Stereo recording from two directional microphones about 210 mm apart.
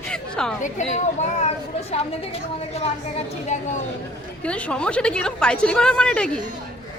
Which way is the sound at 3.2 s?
35° left (ahead or behind).